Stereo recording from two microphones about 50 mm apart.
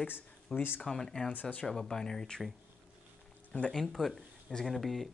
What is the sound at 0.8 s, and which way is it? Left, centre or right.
Speech, centre.